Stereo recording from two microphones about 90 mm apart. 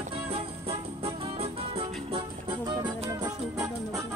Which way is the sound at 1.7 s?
90° right.